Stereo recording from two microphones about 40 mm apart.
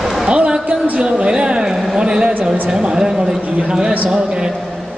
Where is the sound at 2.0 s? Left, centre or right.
Right.